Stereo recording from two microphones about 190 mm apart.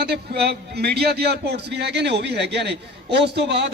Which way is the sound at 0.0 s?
60° right (ahead or behind).